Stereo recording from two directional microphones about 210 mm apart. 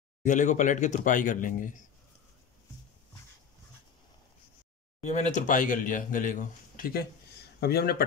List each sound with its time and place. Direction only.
0.2 s speech: 35° left (ahead or behind)
5.1 s speech: 35° left (ahead or behind)